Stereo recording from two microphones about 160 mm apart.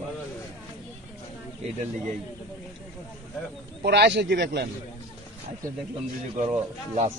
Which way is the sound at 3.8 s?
90° right.